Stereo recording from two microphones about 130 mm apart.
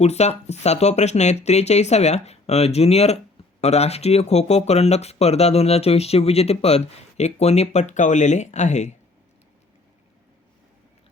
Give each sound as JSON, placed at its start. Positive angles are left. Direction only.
{"t": 0.0, "sound": "speech", "side_deg": 55}